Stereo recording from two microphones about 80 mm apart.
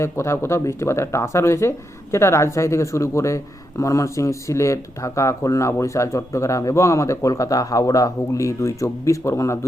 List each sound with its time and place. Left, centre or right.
0.0 s speech: left